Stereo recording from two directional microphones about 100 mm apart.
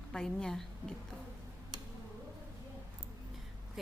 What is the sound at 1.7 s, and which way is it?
Tick-tock, 45° right (ahead or behind).